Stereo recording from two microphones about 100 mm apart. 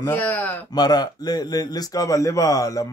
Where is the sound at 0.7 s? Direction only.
40° left (ahead or behind).